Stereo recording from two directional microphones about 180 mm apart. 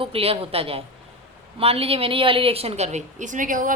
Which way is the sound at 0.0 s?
30° right (ahead or behind).